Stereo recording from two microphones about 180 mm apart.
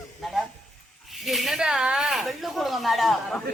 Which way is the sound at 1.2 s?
Centre (ahead or behind).